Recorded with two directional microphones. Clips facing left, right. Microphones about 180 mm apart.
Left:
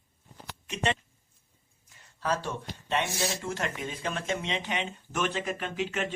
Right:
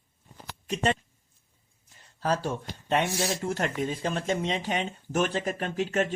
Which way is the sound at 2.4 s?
45° right (ahead or behind).